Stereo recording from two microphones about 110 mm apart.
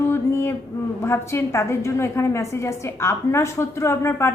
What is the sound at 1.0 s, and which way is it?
A woman's voice, 25° left (ahead or behind).